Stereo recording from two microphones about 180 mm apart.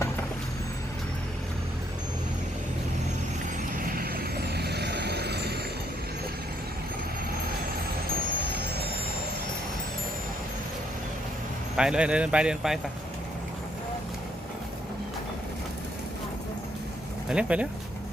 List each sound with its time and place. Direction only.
3.8 s vehicle: 50° right (ahead or behind)
11.8 s speech: 5° right (ahead or behind)
17.2 s speech: 5° right (ahead or behind)